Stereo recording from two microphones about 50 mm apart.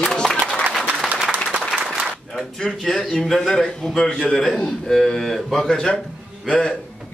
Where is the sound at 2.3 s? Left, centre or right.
Centre.